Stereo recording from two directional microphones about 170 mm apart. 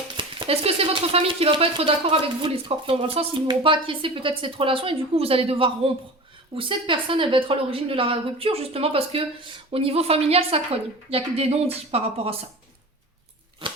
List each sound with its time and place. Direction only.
0.2 s speech: 30° right (ahead or behind)